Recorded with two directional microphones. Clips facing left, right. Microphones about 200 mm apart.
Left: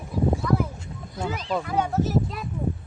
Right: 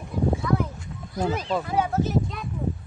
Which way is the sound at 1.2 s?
35° right (ahead or behind).